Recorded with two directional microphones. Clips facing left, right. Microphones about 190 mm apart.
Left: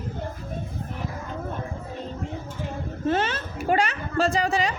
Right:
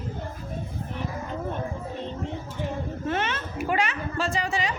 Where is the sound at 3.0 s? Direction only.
30° left (ahead or behind).